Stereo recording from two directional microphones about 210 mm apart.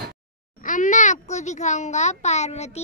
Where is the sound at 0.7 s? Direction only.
35° left (ahead or behind).